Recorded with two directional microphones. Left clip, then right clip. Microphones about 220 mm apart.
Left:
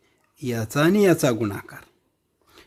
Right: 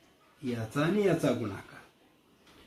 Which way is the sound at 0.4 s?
50° left (ahead or behind).